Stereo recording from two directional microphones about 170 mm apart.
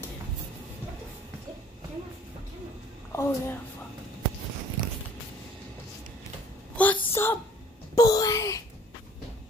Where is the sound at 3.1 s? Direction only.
15° left (ahead or behind).